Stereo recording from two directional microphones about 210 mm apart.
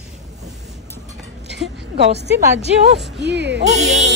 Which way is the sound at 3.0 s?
55° right (ahead or behind).